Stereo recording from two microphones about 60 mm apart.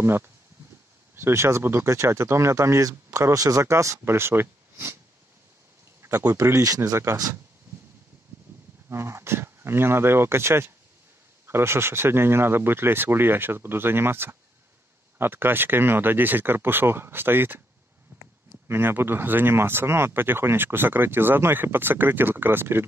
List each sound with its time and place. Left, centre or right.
0.0 s speech: right
6.3 s speech: right
6.9 s speech: right
8.8 s speech: right